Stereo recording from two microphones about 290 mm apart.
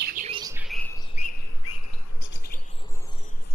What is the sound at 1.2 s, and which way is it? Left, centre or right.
Chirp, left.